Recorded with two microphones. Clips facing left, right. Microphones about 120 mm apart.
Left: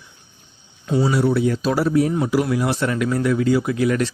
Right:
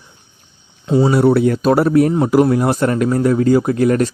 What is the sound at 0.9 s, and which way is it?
Speech, 25° right (ahead or behind).